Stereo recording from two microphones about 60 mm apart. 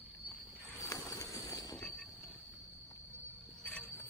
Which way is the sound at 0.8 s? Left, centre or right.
Left.